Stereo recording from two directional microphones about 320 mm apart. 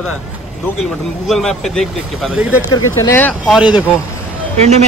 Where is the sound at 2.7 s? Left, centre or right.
Centre.